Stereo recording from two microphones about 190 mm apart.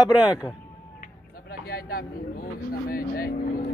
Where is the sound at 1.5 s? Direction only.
50° left (ahead or behind).